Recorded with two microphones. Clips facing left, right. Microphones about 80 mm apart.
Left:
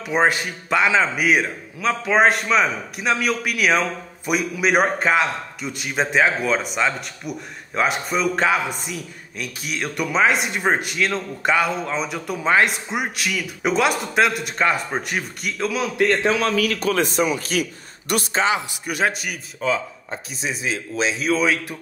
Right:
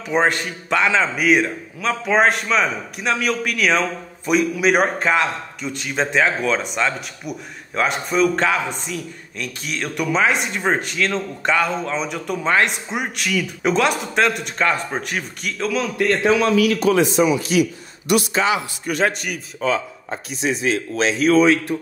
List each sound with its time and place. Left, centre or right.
0.0 s a man's voice: centre
16.4 s a man's voice: left
18.9 s a man's voice: centre